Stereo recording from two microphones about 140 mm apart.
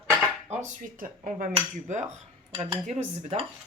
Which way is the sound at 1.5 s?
60° right (ahead or behind).